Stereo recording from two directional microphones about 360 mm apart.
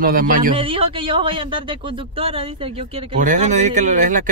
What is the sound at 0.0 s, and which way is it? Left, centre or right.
A man's voice, right.